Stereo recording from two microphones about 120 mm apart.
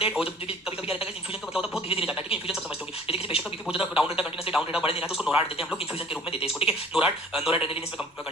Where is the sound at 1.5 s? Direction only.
5° right (ahead or behind).